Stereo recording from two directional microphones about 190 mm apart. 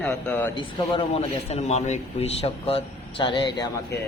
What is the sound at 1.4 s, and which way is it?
Speech, 35° left (ahead or behind).